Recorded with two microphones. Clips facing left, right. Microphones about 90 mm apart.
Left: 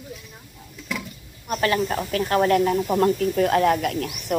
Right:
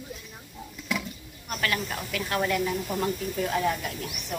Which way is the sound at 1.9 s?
45° left (ahead or behind).